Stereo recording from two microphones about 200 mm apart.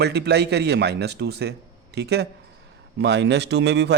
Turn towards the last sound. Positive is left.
turn(degrees=-55)  # may be behind; listen again after turning